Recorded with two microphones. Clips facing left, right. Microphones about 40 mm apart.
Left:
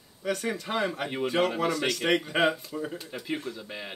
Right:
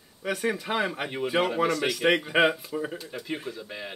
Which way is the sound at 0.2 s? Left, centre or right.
Centre.